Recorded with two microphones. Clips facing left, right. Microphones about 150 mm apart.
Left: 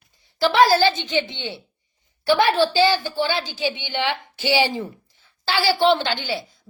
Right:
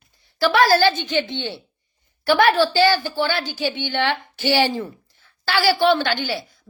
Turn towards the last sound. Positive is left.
turn(degrees=20)  # may be behind; listen again after turning